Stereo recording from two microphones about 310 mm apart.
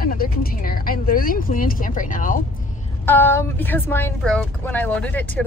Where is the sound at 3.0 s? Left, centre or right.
Centre.